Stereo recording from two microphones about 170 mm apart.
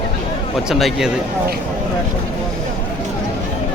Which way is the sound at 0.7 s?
Centre (ahead or behind).